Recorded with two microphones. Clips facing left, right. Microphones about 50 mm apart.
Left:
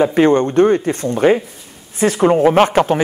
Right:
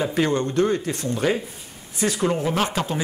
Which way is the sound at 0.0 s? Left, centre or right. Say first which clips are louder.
Left 9 dB; left.